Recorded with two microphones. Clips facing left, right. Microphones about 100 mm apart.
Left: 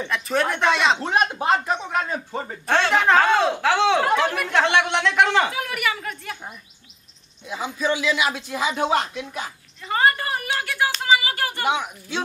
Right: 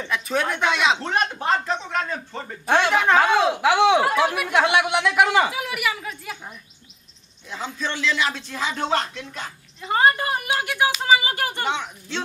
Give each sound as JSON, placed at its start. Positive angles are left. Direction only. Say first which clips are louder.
{"t": 0.1, "sound": "speech", "louder": "left 1 dB", "side_deg": 0}
{"t": 1.0, "sound": "a man's voice", "louder": "left 2 dB", "side_deg": 10}
{"t": 2.6, "sound": "speech", "louder": "right 2 dB", "side_deg": -15}
{"t": 2.9, "sound": "speech", "louder": "left 2 dB", "side_deg": 0}
{"t": 7.4, "sound": "a man's voice", "louder": "left 5 dB", "side_deg": 10}
{"t": 9.8, "sound": "a woman's voice", "louder": "right 1 dB", "side_deg": -20}
{"t": 11.6, "sound": "a man's voice", "louder": "left 3 dB", "side_deg": 10}